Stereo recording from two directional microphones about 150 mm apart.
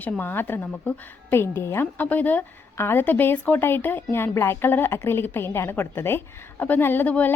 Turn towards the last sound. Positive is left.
turn(degrees=10)  # may be behind; listen again after turning